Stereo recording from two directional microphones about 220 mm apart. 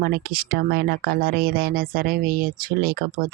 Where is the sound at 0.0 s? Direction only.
45° right (ahead or behind).